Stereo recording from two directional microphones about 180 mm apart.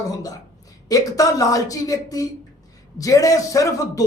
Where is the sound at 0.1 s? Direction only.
20° left (ahead or behind).